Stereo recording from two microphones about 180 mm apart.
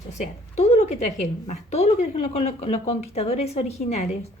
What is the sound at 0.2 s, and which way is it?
A woman's voice, 35° left (ahead or behind).